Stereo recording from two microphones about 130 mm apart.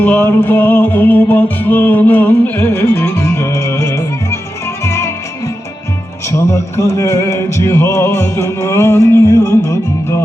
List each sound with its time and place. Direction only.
0.0 s music: 15° left (ahead or behind)
6.2 s music: 25° left (ahead or behind)